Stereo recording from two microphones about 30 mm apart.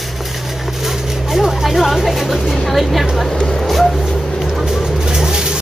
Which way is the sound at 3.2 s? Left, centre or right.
Centre.